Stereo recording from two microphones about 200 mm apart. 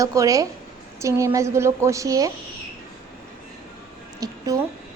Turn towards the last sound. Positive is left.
turn(degrees=-15)  # may be behind; listen again after turning